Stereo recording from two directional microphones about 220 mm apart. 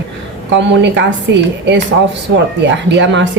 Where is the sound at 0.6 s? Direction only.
55° right (ahead or behind).